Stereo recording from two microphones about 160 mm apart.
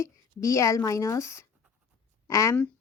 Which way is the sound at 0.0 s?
20° left (ahead or behind).